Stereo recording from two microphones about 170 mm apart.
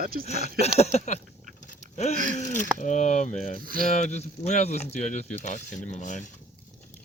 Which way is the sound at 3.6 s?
55° right (ahead or behind).